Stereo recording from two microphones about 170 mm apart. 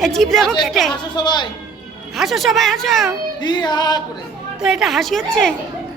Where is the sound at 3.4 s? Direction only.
25° left (ahead or behind).